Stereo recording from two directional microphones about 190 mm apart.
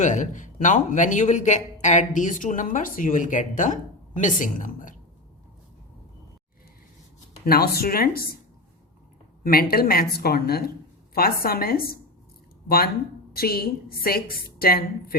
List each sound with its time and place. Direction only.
0.0 s a man's voice: 40° left (ahead or behind)
7.4 s a woman's voice: 55° left (ahead or behind)
9.4 s a woman's voice: 50° left (ahead or behind)